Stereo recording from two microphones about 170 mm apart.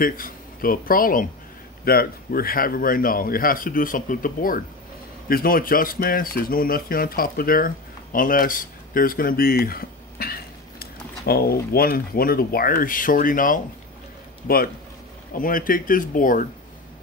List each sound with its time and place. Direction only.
0.0 s a man's voice: 55° left (ahead or behind)
15.3 s a man's voice: 55° left (ahead or behind)